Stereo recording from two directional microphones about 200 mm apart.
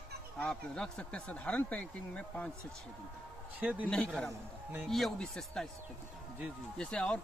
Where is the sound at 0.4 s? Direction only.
5° left (ahead or behind).